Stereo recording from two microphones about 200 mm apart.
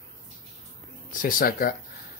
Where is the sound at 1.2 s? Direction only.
45° left (ahead or behind).